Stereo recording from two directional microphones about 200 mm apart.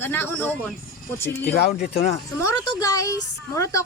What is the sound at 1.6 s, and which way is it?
Speech, 50° left (ahead or behind).